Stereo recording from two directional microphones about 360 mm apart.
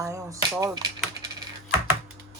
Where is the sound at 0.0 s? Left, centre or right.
Centre.